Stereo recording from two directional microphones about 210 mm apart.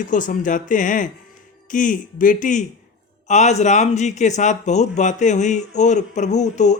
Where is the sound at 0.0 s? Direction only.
40° left (ahead or behind).